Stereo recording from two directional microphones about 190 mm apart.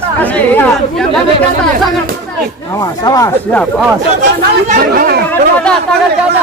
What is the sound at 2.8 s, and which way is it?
Speech, 20° left (ahead or behind).